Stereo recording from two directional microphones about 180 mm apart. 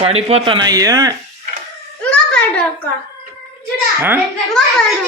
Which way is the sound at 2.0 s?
5° left (ahead or behind).